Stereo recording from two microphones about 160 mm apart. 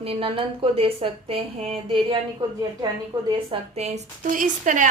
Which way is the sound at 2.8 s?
25° right (ahead or behind).